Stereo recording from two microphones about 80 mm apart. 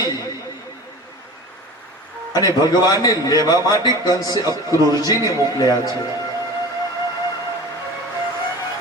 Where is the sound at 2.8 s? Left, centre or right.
Left.